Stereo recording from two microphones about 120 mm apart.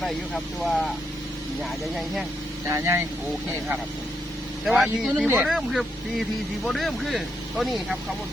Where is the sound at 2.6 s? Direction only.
25° right (ahead or behind).